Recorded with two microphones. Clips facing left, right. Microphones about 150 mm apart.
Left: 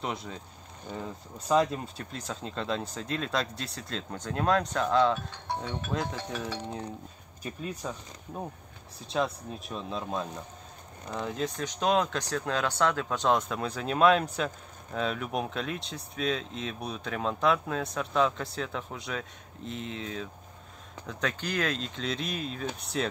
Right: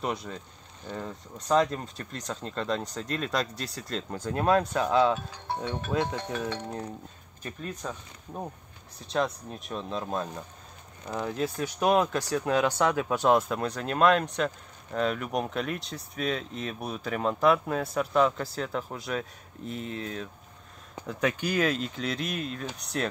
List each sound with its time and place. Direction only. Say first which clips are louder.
0.0 s speech: right 3 dB; centre (ahead or behind)
9.0 s speech: right 1 dB; centre (ahead or behind)